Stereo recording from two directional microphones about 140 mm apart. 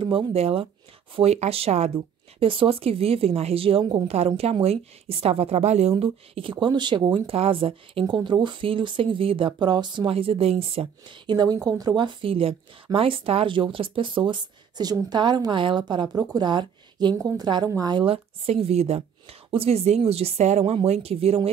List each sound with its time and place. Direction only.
0.0 s a woman's voice: 40° right (ahead or behind)